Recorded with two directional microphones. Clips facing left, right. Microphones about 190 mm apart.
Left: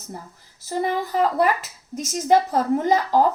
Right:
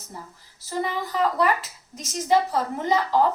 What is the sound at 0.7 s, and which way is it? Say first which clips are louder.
A woman's voice: left 4 dB; 45° left (ahead or behind).